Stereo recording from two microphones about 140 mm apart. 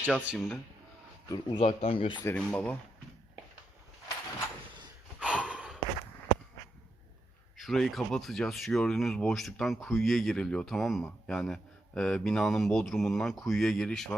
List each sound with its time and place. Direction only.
0.0 s speech: 10° right (ahead or behind)
0.3 s speech: 5° left (ahead or behind)
1.5 s speech: 45° left (ahead or behind)
2.2 s speech: 10° left (ahead or behind)
5.2 s a sound: 10° right (ahead or behind)
7.5 s speech: centre (ahead or behind)